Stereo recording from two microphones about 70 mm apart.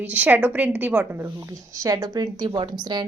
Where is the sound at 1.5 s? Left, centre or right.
Right.